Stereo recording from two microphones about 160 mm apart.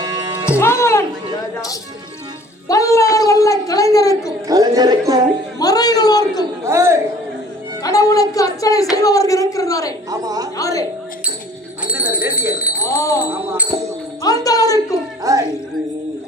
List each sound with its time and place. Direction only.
0.0 s music: 15° right (ahead or behind)
0.5 s speech: 15° left (ahead or behind)
2.6 s speech: 20° left (ahead or behind)
4.4 s speech: 20° right (ahead or behind)
5.5 s speech: 25° left (ahead or behind)
6.7 s a man's voice: 15° right (ahead or behind)
7.8 s speech: 20° left (ahead or behind)
10.1 s speech: 25° right (ahead or behind)
10.6 s speech: 20° left (ahead or behind)
11.9 s bell: 10° right (ahead or behind)
12.8 s wind chime: 20° left (ahead or behind)
13.3 s a man's voice: 15° right (ahead or behind)
14.2 s speech: 20° left (ahead or behind)
15.2 s speech: 20° right (ahead or behind)